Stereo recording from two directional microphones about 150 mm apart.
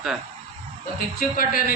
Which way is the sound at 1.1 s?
70° left (ahead or behind).